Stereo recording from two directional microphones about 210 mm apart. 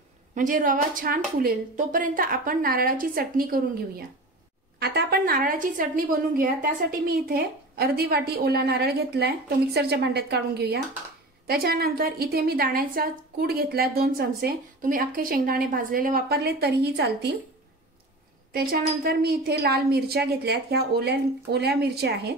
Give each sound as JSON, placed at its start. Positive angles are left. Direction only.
{"t": 0.3, "sound": "a woman's voice", "side_deg": -40}
{"t": 4.7, "sound": "a woman's voice", "side_deg": -50}
{"t": 18.5, "sound": "a woman's voice", "side_deg": -45}